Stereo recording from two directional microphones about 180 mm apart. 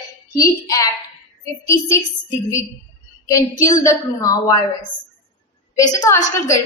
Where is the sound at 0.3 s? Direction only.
20° left (ahead or behind).